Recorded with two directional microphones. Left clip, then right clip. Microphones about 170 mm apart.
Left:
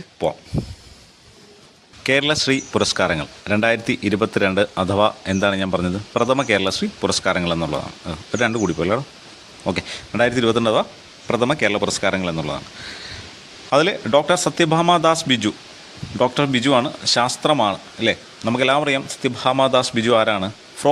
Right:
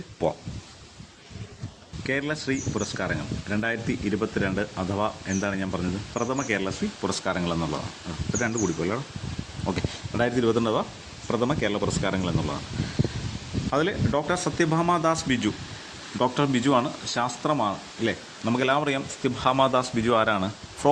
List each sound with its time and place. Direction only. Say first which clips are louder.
2.0 s speech: left 10 dB; 35° left (ahead or behind); by 12.5 s 15° left (ahead or behind)
13.7 s speech: left 9 dB; 25° left (ahead or behind)